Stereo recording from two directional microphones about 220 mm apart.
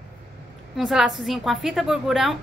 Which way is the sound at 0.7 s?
Centre (ahead or behind).